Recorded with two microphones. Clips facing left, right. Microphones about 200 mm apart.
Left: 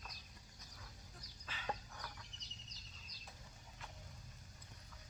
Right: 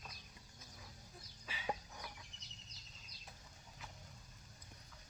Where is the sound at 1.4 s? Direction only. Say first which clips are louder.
Right 2 dB; 10° right (ahead or behind).